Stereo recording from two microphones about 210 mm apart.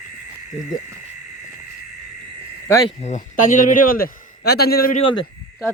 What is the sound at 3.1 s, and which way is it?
A man's voice, 40° left (ahead or behind).